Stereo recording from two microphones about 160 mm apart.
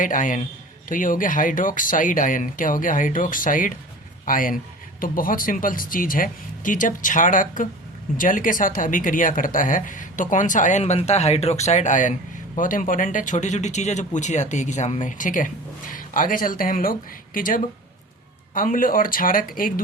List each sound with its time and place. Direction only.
0.0 s a man's voice: 55° left (ahead or behind)